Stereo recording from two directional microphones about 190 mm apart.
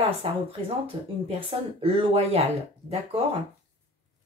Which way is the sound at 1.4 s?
25° right (ahead or behind).